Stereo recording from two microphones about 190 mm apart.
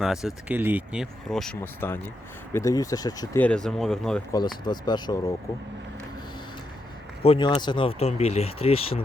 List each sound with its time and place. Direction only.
0.0 s speech: centre (ahead or behind)
1.3 s speech: 5° left (ahead or behind); by 3.4 s 20° left (ahead or behind)
3.4 s speech: 5° left (ahead or behind)
4.3 s speech: 20° left (ahead or behind)
7.2 s speech: 30° left (ahead or behind)